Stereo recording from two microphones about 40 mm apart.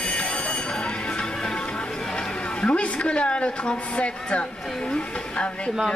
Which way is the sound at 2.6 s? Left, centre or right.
Left.